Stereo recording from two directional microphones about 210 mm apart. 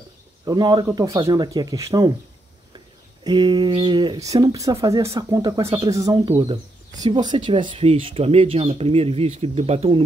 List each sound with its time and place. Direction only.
0.5 s speech: 20° right (ahead or behind)
3.3 s speech: 20° right (ahead or behind)